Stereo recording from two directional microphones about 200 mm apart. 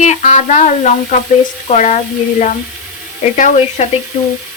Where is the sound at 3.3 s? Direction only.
40° left (ahead or behind).